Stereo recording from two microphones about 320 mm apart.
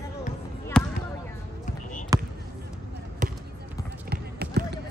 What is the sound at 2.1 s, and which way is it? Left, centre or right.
Basketball bounce, centre.